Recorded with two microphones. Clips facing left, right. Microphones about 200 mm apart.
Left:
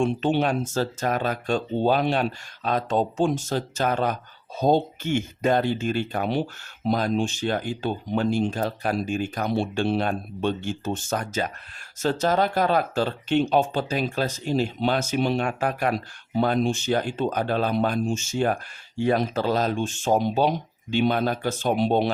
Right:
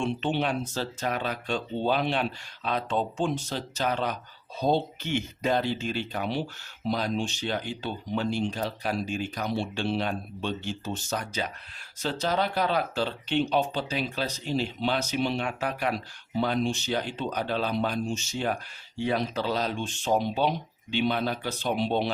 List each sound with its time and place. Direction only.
0.0 s speech: 45° left (ahead or behind)